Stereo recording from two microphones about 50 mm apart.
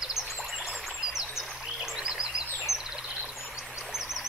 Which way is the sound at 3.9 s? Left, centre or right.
Centre.